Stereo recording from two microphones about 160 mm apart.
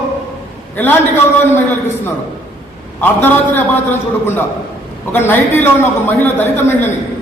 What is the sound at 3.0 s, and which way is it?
Speech, 10° left (ahead or behind).